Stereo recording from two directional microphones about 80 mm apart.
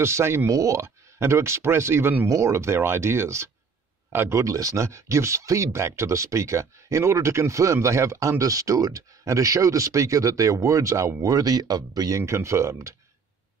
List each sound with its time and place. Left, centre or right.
0.0 s speech: right
0.5 s speech: right
2.2 s speech: right
11.3 s speech: right
12.2 s speech: right